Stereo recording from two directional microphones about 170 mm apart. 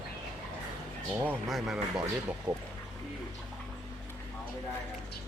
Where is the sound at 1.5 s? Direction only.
Centre (ahead or behind).